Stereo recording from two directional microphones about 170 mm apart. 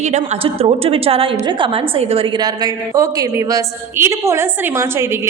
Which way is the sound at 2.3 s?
25° right (ahead or behind).